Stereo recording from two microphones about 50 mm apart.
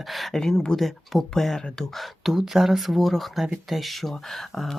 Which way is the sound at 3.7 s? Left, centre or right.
Centre.